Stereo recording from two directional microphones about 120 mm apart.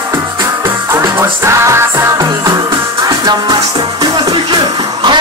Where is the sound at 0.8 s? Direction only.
20° right (ahead or behind).